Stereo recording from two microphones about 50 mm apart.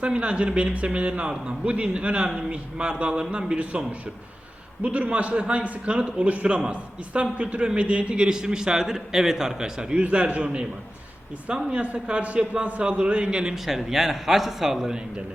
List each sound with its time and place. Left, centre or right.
0.0 s a man's voice: right
10.0 s a man's voice: right
13.7 s a man's voice: centre